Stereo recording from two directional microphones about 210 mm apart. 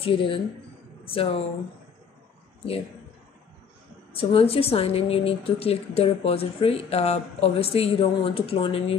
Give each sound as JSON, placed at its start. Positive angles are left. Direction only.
{"t": 0.0, "sound": "speech", "side_deg": 25}
{"t": 4.1, "sound": "speech", "side_deg": 25}